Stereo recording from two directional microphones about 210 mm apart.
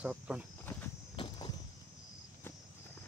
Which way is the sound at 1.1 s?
25° left (ahead or behind).